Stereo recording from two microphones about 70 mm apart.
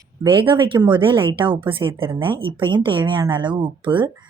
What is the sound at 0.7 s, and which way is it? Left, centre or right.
Speech, right.